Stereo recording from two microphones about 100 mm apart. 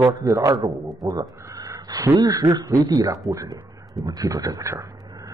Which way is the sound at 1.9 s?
45° right (ahead or behind).